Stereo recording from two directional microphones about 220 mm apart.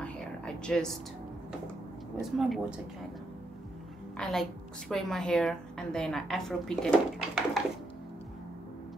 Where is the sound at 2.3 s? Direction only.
Centre (ahead or behind).